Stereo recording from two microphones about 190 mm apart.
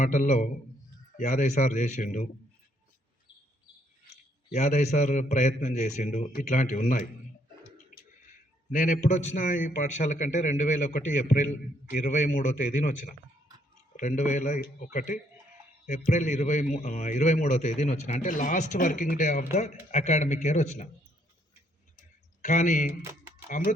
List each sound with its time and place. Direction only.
0.0 s a man's voice: 40° left (ahead or behind)
4.5 s a man's voice: 40° left (ahead or behind)
8.3 s a man's voice: 45° left (ahead or behind)
22.4 s speech: 40° left (ahead or behind)